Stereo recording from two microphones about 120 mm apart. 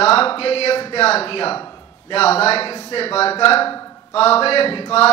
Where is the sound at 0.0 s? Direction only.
50° left (ahead or behind).